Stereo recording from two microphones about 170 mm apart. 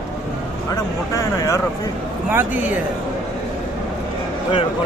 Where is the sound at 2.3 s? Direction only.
10° right (ahead or behind).